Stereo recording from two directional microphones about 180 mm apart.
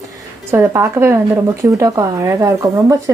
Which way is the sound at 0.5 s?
15° right (ahead or behind).